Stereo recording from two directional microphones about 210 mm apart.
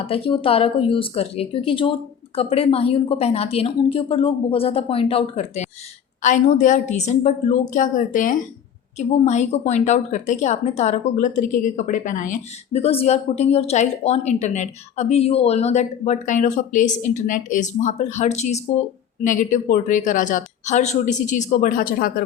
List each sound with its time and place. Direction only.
0.0 s a woman's voice: 25° left (ahead or behind); by 22.2 s 45° left (ahead or behind)